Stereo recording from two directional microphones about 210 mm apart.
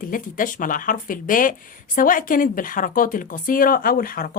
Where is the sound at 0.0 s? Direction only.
40° left (ahead or behind).